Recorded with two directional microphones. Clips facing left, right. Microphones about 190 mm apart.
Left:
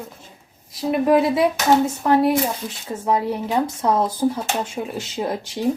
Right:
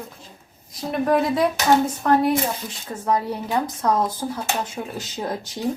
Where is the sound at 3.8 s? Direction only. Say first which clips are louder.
Left 4 dB; 20° left (ahead or behind).